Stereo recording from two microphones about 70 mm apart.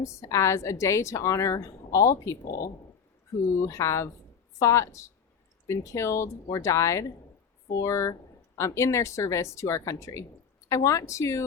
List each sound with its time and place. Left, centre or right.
0.0 s a woman's voice: left
3.5 s a woman's voice: left